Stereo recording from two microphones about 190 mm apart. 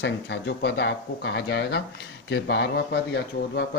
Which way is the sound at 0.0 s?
65° left (ahead or behind).